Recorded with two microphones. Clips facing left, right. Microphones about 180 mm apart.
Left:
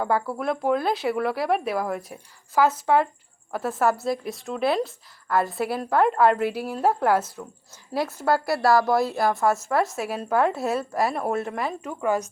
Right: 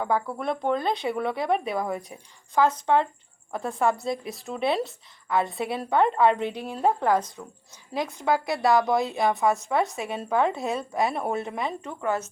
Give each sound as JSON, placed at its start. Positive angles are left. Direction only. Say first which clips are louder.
{"t": 0.0, "sound": "a woman's voice", "louder": "left 2 dB", "side_deg": 5}